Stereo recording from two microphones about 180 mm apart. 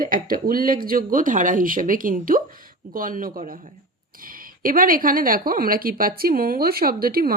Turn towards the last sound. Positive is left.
turn(degrees=-55)  # may be behind; listen again after turning